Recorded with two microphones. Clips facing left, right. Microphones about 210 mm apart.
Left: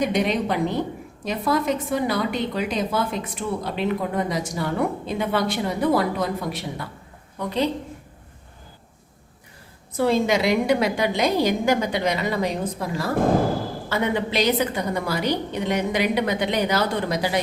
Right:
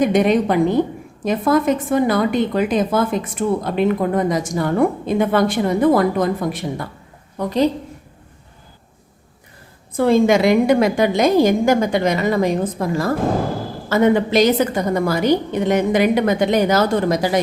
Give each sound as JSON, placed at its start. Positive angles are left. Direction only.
{"t": 0.0, "sound": "a woman's voice", "side_deg": -50}
{"t": 10.0, "sound": "a woman's voice", "side_deg": -50}